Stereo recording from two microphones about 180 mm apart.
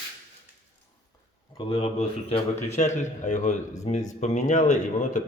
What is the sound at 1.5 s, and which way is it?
A man's voice, 35° left (ahead or behind).